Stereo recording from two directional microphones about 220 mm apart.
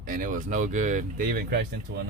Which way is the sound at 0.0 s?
40° right (ahead or behind).